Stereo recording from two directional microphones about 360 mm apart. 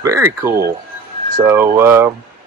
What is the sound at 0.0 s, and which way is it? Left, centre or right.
Speech, centre.